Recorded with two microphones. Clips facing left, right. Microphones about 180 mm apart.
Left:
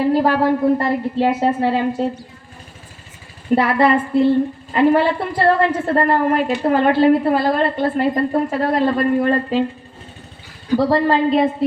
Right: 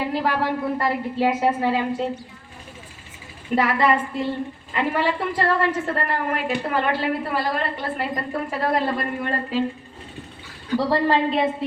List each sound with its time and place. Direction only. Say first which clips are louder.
0.0 s a sound: left 8 dB; 40° left (ahead or behind)
0.8 s a woman's voice: left 4 dB; 40° left (ahead or behind)
3.5 s a woman's voice: left 5 dB; 35° left (ahead or behind)
10.8 s a woman's voice: left 4 dB; 40° left (ahead or behind)